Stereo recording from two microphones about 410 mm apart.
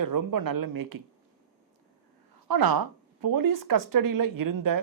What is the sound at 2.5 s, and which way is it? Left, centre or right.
Speech, right.